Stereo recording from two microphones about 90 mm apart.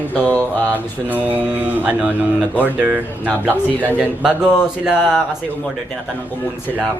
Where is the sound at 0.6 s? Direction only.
20° right (ahead or behind).